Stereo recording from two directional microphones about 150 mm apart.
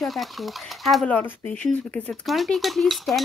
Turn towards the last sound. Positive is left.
turn(degrees=0)  # may be behind; listen again after turning